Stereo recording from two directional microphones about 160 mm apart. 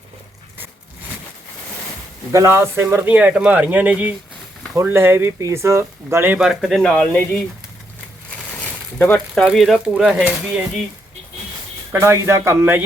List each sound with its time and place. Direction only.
2.3 s speech: 15° right (ahead or behind); by 7.4 s 5° left (ahead or behind)
8.6 s a sound: 15° left (ahead or behind)
9.3 s speech: centre (ahead or behind)
11.9 s speech: 15° right (ahead or behind)